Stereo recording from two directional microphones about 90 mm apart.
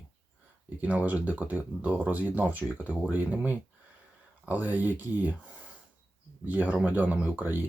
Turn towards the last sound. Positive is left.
turn(degrees=-20)  # may be behind; listen again after turning